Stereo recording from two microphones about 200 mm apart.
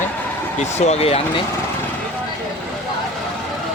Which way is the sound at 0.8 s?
30° left (ahead or behind).